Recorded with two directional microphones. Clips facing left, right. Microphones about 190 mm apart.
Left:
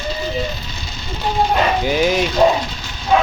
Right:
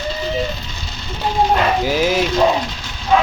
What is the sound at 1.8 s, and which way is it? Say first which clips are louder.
Speech: even; 5° right (ahead or behind).